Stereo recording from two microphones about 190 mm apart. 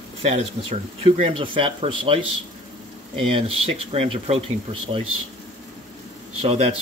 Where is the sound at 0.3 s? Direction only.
30° right (ahead or behind).